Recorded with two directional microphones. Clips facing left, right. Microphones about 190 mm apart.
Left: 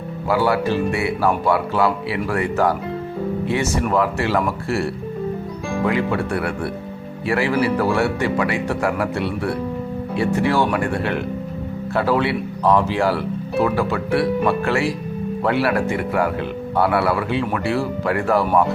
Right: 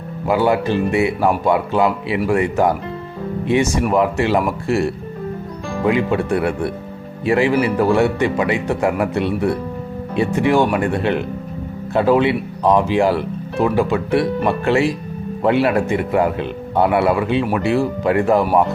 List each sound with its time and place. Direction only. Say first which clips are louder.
0.3 s speech: right 2 dB; 20° right (ahead or behind)